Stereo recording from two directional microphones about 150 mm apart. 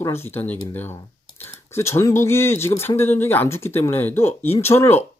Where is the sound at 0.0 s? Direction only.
15° left (ahead or behind).